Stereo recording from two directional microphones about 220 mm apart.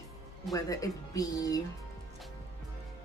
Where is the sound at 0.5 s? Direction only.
15° left (ahead or behind).